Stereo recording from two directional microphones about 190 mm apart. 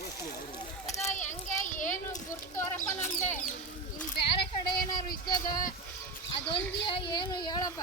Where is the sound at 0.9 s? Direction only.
35° left (ahead or behind).